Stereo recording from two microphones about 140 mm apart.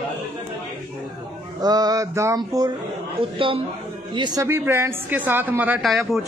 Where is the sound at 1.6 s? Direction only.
30° right (ahead or behind).